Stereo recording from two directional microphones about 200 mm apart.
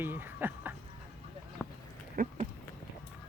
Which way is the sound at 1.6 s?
5° right (ahead or behind).